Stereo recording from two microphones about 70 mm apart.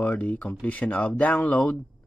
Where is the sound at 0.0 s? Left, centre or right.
Centre.